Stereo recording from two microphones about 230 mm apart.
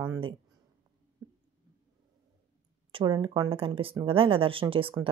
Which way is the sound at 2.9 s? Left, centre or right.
Right.